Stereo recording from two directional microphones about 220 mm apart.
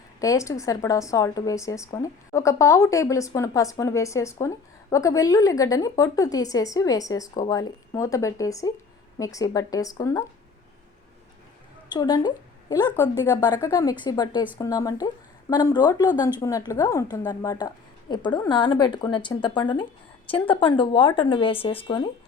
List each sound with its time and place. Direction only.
0.2 s speech: 15° left (ahead or behind)
11.9 s a woman's voice: 20° left (ahead or behind)